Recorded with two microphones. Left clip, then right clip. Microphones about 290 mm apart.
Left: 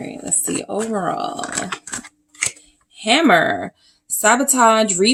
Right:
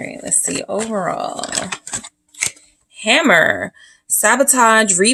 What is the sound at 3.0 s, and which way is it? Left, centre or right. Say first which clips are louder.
A woman's voice: right 2 dB; right.